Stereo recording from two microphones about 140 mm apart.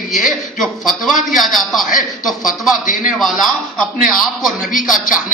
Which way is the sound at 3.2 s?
Centre (ahead or behind).